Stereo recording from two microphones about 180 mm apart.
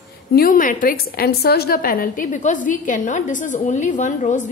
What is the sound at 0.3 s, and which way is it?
A woman's voice, 55° left (ahead or behind).